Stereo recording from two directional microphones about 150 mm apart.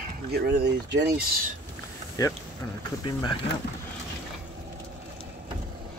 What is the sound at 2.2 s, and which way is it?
Speech, 25° left (ahead or behind).